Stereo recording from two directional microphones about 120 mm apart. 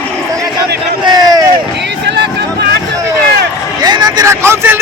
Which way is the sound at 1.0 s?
35° right (ahead or behind).